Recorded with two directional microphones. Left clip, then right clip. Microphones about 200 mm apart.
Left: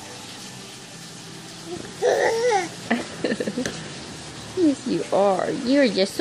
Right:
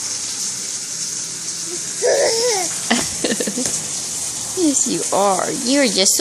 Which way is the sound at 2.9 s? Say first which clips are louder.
Right 6 dB; 25° right (ahead or behind).